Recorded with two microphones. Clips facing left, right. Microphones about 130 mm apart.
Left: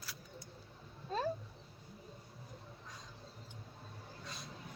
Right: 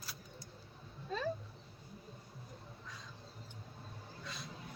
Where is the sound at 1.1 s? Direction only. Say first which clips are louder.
Left 2 dB; 45° left (ahead or behind).